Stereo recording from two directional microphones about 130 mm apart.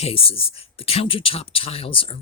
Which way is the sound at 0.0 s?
45° left (ahead or behind).